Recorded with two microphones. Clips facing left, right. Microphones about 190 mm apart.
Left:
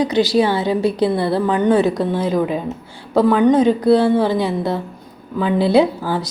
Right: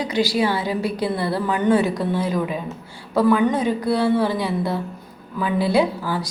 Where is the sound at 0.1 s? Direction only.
25° left (ahead or behind).